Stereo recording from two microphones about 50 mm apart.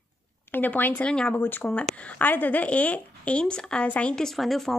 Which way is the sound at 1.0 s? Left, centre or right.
Centre.